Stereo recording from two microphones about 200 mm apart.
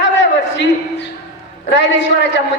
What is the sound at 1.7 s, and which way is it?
Speech, 60° left (ahead or behind).